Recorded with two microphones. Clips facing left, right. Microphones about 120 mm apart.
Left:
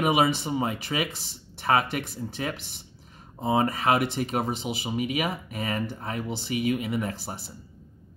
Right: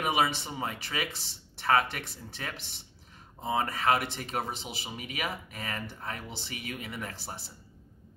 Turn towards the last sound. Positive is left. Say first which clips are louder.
# left 9 dB
turn(degrees=20)  # may be behind; listen again after turning